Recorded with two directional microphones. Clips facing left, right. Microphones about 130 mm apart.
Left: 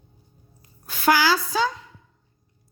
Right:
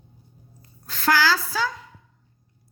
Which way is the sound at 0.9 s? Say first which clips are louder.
Left 2 dB; 15° left (ahead or behind).